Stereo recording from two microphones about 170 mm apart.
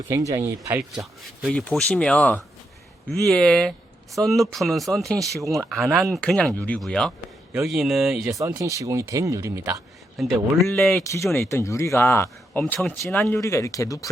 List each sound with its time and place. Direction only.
0.4 s speech: 10° right (ahead or behind)
8.4 s speech: 20° right (ahead or behind)
10.2 s speech: centre (ahead or behind)
11.0 s speech: 15° left (ahead or behind)